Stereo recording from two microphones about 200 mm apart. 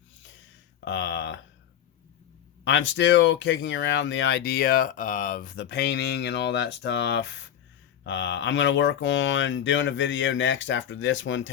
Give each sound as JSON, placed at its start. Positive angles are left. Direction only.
{"t": 0.9, "sound": "a sound", "side_deg": 65}
{"t": 2.6, "sound": "speech", "side_deg": 65}
{"t": 5.5, "sound": "speech", "side_deg": 60}